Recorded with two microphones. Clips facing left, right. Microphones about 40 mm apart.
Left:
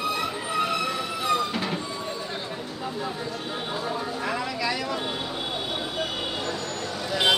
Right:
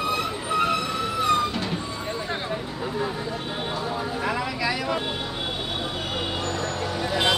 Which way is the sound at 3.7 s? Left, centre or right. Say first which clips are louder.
Right 1 dB; centre.